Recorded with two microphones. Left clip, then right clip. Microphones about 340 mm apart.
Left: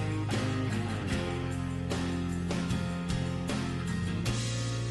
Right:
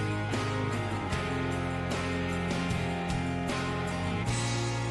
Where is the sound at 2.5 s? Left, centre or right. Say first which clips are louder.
Right 3 dB; centre.